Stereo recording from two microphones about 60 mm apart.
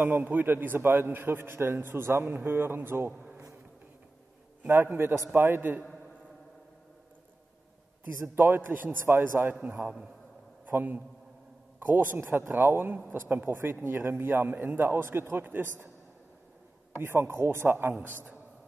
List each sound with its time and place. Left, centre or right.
0.2 s a man's voice: right
4.6 s a man's voice: right
8.2 s a man's voice: right
9.5 s a man's voice: right
16.9 s a man's voice: right